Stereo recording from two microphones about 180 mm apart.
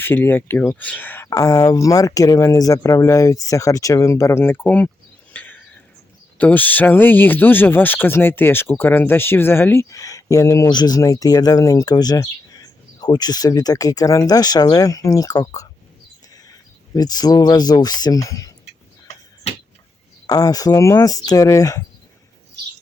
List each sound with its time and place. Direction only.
0.0 s speech: 10° left (ahead or behind)
5.3 s a sound: 10° left (ahead or behind)
6.4 s speech: 10° left (ahead or behind)
16.9 s speech: 20° left (ahead or behind)
20.2 s speech: 20° left (ahead or behind)